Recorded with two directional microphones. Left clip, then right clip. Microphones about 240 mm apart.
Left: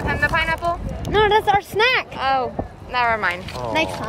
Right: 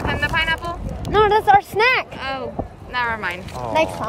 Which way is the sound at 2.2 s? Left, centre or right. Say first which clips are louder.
Left 6 dB; centre.